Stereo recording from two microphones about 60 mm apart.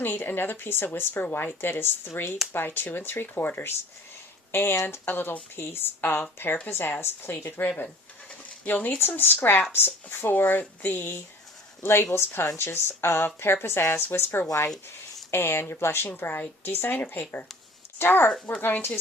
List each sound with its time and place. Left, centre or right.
0.0 s speech: left
11.8 s speech: left